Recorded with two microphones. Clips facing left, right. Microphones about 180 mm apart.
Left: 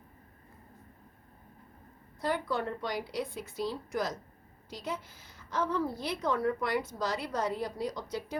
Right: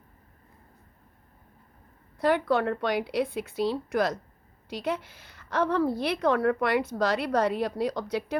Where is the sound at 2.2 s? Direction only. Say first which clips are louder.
Right 8 dB; 70° right (ahead or behind).